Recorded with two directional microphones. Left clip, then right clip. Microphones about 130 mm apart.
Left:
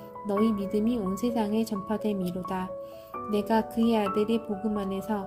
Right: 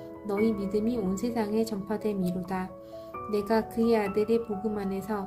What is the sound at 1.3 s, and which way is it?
Speech, 20° left (ahead or behind).